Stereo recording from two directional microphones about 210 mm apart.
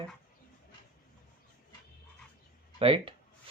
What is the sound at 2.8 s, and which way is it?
Speech, 25° right (ahead or behind).